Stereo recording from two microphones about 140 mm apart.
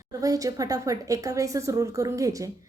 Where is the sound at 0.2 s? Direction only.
25° right (ahead or behind).